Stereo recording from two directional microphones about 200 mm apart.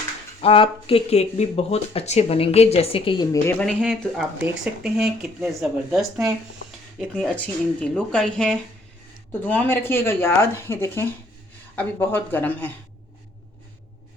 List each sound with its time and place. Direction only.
0.4 s speech: 30° left (ahead or behind)
3.4 s speech: 5° left (ahead or behind)
7.2 s speech: 5° left (ahead or behind)